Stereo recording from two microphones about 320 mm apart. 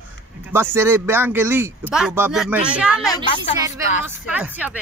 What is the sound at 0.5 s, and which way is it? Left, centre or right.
Speech, centre.